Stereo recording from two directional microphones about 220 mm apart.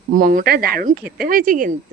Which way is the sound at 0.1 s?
35° right (ahead or behind).